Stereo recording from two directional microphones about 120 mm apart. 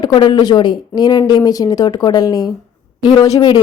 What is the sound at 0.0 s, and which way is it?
Speech, 40° left (ahead or behind).